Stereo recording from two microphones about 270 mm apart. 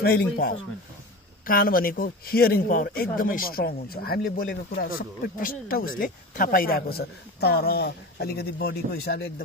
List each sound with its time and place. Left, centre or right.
0.0 s speech: left